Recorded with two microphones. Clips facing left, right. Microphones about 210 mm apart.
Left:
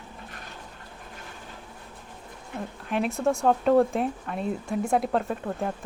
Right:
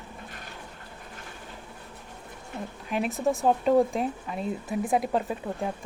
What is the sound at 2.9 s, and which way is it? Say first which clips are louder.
Speech: left 1 dB; centre (ahead or behind).